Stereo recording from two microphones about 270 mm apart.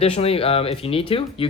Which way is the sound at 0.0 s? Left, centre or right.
Left.